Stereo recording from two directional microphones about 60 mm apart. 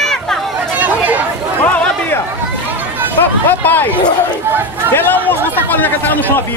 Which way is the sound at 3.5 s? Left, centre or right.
Left.